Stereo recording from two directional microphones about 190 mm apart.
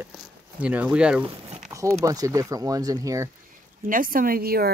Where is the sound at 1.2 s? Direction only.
30° right (ahead or behind).